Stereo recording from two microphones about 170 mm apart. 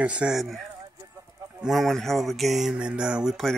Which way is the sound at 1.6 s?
Centre (ahead or behind).